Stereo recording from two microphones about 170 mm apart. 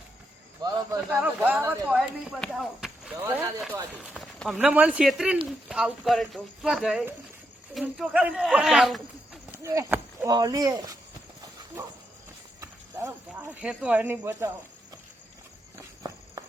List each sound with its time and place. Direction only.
0.6 s cricket: 20° right (ahead or behind)
1.0 s speech: 10° right (ahead or behind)
1.9 s speech: centre (ahead or behind)
9.6 s horse: 15° right (ahead or behind)
10.3 s speech: 20° right (ahead or behind)
12.5 s speech: 15° right (ahead or behind)